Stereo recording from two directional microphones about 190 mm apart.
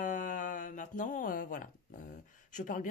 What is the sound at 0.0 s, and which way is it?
Speech, 45° left (ahead or behind).